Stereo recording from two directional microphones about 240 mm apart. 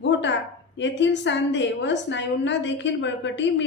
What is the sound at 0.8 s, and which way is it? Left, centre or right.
A woman's voice, left.